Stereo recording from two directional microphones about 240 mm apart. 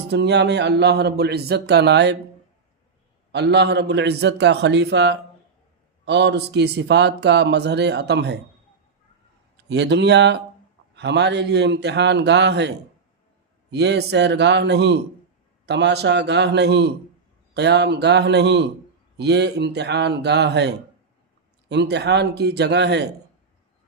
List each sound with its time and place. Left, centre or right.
0.1 s speech: right
3.3 s speech: right
9.6 s speech: right